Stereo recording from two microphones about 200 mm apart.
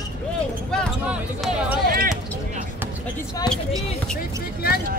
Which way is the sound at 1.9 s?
45° right (ahead or behind).